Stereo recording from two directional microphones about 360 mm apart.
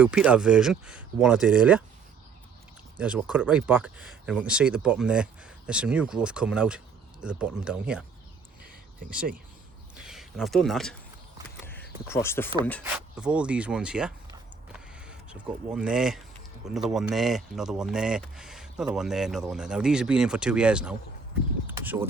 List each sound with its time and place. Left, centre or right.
0.0 s speech: centre
3.0 s speech: centre
9.0 s speech: centre
11.6 s a sound: centre
12.8 s speech: centre
21.7 s vehicle: centre